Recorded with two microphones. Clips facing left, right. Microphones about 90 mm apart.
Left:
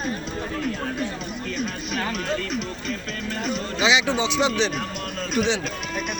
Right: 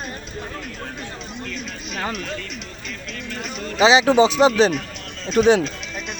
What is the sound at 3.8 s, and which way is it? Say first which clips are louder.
Speech: right 8 dB; 35° right (ahead or behind).